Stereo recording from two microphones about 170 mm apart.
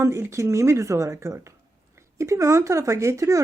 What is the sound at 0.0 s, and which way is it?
Speech, 15° right (ahead or behind).